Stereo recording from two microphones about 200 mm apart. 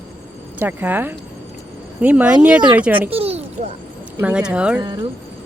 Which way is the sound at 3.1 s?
30° right (ahead or behind).